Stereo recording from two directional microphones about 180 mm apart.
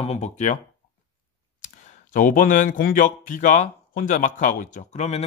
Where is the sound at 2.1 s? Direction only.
50° left (ahead or behind).